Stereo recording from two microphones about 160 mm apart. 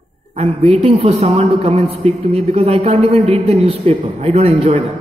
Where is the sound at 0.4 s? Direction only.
40° right (ahead or behind).